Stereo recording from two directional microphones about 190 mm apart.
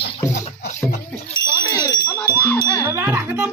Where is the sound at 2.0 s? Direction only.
15° left (ahead or behind).